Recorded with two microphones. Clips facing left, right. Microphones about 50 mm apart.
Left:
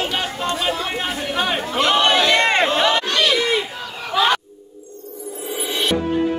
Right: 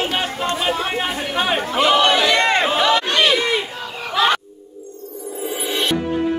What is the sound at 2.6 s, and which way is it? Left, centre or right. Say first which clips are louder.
Run: right 1 dB; centre.